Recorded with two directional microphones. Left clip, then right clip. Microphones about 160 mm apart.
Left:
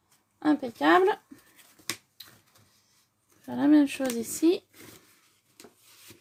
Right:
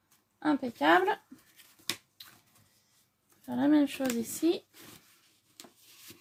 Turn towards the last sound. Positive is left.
turn(degrees=45)  # may be behind; listen again after turning